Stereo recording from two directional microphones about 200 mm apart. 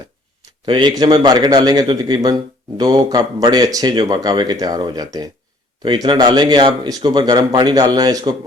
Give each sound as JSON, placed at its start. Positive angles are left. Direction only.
{"t": 0.6, "sound": "speech", "side_deg": -20}